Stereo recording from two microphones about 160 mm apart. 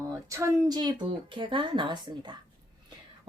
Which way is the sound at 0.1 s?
20° right (ahead or behind).